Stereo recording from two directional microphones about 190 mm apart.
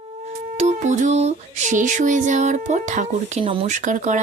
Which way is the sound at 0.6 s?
35° right (ahead or behind).